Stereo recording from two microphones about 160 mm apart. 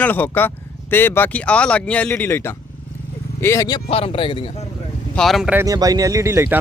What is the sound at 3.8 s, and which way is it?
Speech, 35° left (ahead or behind).